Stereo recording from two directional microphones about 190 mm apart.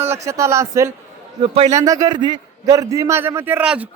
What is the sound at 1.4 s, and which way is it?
Speech, 30° right (ahead or behind).